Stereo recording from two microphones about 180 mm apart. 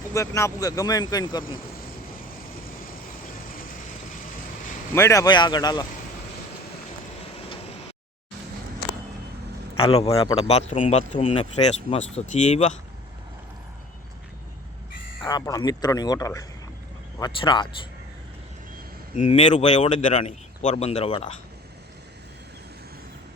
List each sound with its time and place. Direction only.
0.1 s speech: 15° left (ahead or behind)
4.9 s speech: 15° left (ahead or behind)
7.3 s a sound: 35° left (ahead or behind)
9.7 s a man's voice: 35° left (ahead or behind)
15.2 s speech: 20° left (ahead or behind)
19.1 s speech: 40° left (ahead or behind)